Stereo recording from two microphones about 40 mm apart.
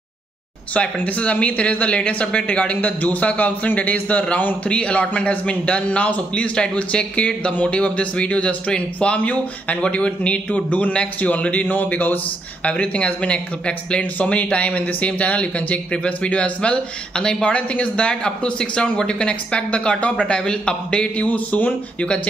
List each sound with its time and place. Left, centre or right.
0.7 s a man's voice: left
12.6 s a man's voice: left
17.1 s a man's voice: centre
17.5 s a man's voice: left